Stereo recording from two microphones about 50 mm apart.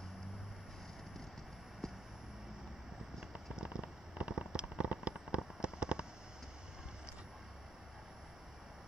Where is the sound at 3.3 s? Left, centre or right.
Centre.